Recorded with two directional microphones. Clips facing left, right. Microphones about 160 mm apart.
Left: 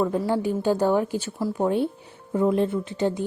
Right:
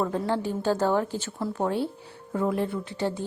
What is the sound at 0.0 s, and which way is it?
A woman's voice, 10° left (ahead or behind).